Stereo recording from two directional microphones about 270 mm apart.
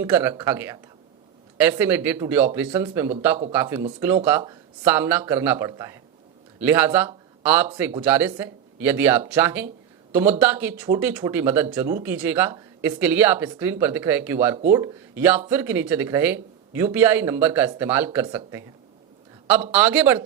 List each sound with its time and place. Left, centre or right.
0.0 s speech: centre
1.8 s speech: centre
19.7 s speech: centre